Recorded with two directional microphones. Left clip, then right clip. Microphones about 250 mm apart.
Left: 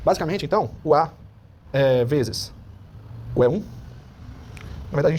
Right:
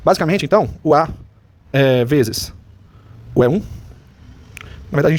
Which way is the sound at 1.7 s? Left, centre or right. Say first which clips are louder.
Right 4 dB; right.